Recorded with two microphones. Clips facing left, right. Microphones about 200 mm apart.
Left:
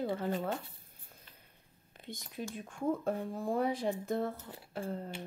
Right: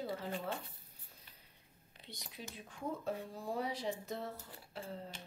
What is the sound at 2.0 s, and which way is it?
Speech, 50° left (ahead or behind).